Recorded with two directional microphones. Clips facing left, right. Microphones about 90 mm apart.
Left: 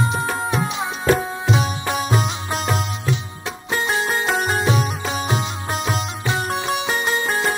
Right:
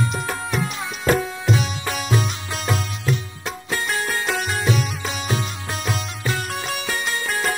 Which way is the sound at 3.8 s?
25° left (ahead or behind).